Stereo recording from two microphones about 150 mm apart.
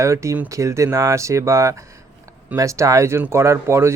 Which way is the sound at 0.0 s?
20° right (ahead or behind).